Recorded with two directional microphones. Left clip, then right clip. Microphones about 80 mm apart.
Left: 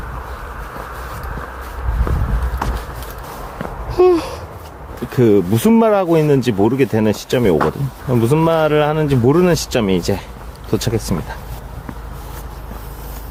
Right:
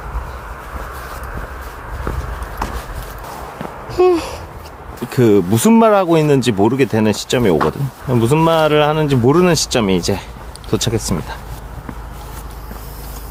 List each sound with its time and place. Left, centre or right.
2.1 s walk: centre
2.6 s clip-clop: centre
3.8 s babbling: centre
5.1 s speech: right
5.5 s speech: right
8.0 s speech: right
8.4 s speech: right